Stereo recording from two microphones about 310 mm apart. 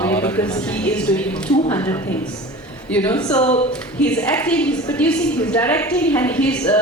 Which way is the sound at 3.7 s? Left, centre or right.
Centre.